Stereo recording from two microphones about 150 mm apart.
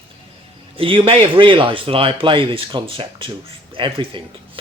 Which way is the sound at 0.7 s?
35° right (ahead or behind).